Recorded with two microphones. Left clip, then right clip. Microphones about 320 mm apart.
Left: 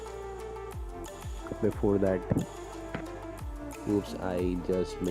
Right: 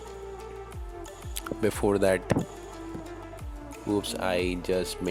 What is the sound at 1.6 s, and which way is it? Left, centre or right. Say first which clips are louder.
Speech: right 3 dB; right.